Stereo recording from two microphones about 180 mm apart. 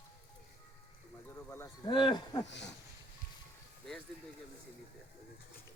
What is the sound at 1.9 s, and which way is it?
Speech, 25° left (ahead or behind).